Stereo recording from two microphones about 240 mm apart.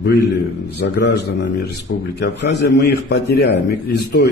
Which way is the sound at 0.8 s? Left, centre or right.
Left.